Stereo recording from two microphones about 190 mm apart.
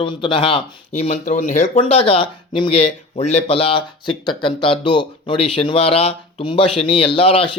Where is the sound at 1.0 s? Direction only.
40° left (ahead or behind).